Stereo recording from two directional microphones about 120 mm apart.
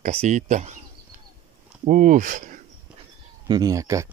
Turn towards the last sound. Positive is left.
turn(degrees=-25)  # may be behind; listen again after turning